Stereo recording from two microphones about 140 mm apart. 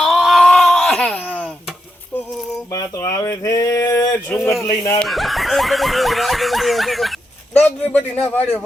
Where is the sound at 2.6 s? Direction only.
25° left (ahead or behind).